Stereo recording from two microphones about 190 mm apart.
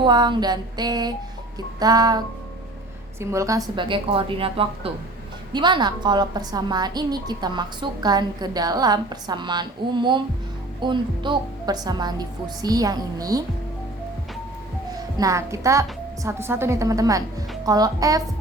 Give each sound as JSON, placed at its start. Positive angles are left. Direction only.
{"t": 0.0, "sound": "a woman's voice", "side_deg": -25}
{"t": 15.2, "sound": "a woman's voice", "side_deg": -15}